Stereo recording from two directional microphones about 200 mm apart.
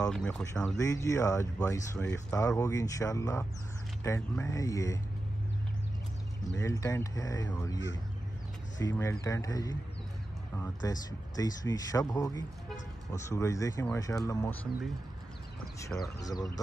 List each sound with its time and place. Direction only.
0.1 s speech: 5° left (ahead or behind)
0.7 s speech: 15° left (ahead or behind)
6.6 s speech: 15° left (ahead or behind)
16.2 s speech: 20° left (ahead or behind)